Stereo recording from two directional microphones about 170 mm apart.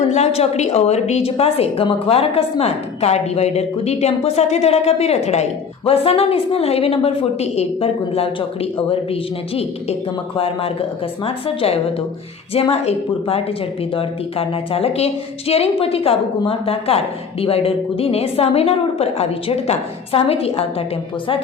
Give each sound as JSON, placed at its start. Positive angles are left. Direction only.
{"t": 0.0, "sound": "a woman's voice", "side_deg": 40}
{"t": 10.3, "sound": "a woman's voice", "side_deg": 35}